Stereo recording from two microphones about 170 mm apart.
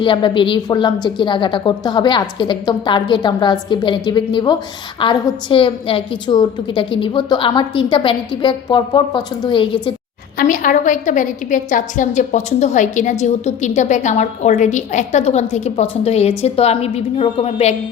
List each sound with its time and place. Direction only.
0.0 s a woman's voice: 30° left (ahead or behind)
10.3 s a woman's voice: 50° left (ahead or behind)